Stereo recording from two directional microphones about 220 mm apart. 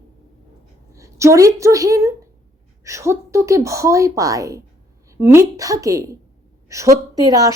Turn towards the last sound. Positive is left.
turn(degrees=-15)  # may be behind; listen again after turning